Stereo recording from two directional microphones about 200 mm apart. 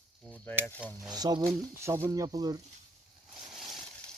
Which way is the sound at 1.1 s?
20° right (ahead or behind).